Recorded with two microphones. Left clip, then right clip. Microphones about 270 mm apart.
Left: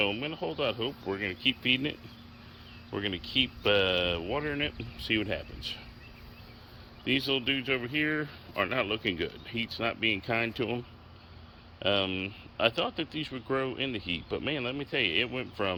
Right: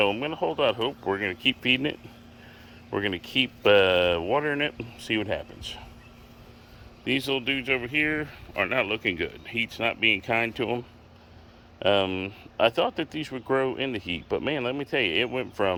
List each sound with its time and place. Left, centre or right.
0.0 s speech: centre
7.0 s speech: centre